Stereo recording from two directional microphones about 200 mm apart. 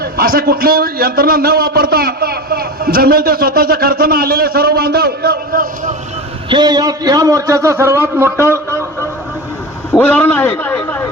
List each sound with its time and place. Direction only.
0.0 s a man's voice: 50° right (ahead or behind)
6.5 s a man's voice: 20° right (ahead or behind)
8.4 s a man's voice: 15° left (ahead or behind)
10.0 s a man's voice: 10° left (ahead or behind)